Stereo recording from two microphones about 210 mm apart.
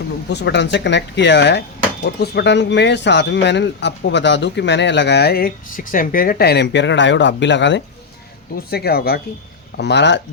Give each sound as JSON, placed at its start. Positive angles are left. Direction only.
{"t": 0.3, "sound": "speech", "side_deg": 55}
{"t": 8.5, "sound": "speech", "side_deg": 50}